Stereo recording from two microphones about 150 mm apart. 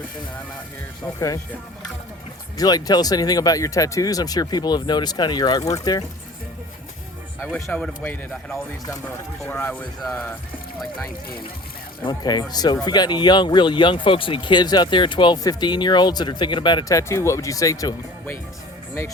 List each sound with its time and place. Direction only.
2.6 s speech: 25° left (ahead or behind)
7.5 s speech: 10° left (ahead or behind)
12.0 s speech: 30° left (ahead or behind)